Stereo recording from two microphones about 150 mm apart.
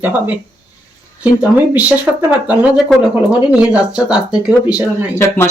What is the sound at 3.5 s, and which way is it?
Speech, 5° right (ahead or behind).